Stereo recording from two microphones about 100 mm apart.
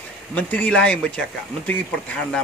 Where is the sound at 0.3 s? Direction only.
15° left (ahead or behind).